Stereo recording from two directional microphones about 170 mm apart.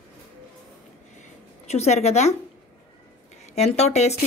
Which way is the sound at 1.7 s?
40° left (ahead or behind).